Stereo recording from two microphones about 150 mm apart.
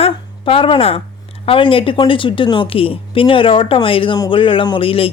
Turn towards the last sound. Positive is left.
turn(degrees=40)  # may be behind; listen again after turning